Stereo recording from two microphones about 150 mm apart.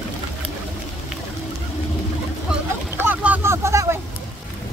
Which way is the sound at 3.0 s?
10° right (ahead or behind).